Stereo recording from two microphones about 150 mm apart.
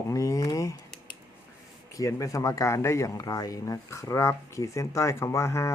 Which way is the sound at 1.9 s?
20° left (ahead or behind).